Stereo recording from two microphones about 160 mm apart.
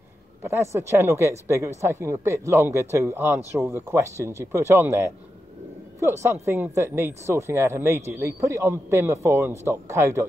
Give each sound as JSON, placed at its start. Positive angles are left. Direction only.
{"t": 0.4, "sound": "speech", "side_deg": -15}